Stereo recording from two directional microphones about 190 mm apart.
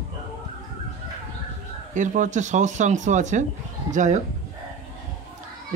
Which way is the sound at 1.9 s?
40° right (ahead or behind).